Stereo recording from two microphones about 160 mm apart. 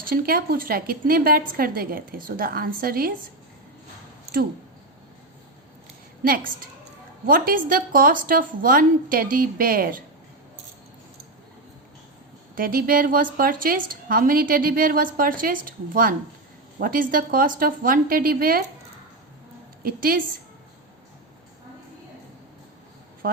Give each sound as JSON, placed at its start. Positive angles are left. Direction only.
{"t": 0.0, "sound": "a woman's voice", "side_deg": -65}
{"t": 6.2, "sound": "a woman's voice", "side_deg": -65}
{"t": 12.5, "sound": "a woman's voice", "side_deg": -65}
{"t": 19.8, "sound": "a woman's voice", "side_deg": -65}
{"t": 23.2, "sound": "speech", "side_deg": -65}